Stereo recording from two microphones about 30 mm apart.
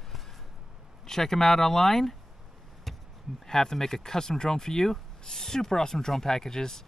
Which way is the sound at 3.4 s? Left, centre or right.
Centre.